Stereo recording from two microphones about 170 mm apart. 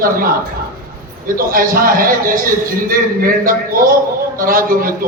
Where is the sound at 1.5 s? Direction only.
55° right (ahead or behind).